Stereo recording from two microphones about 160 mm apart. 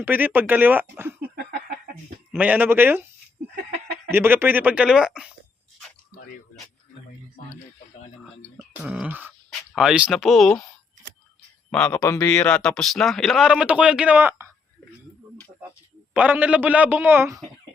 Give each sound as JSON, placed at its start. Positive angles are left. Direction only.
{"t": 0.0, "sound": "a man's voice", "side_deg": -10}
{"t": 1.5, "sound": "a sound", "side_deg": -65}
{"t": 2.3, "sound": "a man's voice", "side_deg": -10}
{"t": 4.1, "sound": "a man's voice", "side_deg": -15}
{"t": 8.5, "sound": "speech", "side_deg": -5}
{"t": 11.9, "sound": "a man's voice", "side_deg": 20}
{"t": 12.4, "sound": "speech", "side_deg": 5}
{"t": 16.1, "sound": "a man's voice", "side_deg": -10}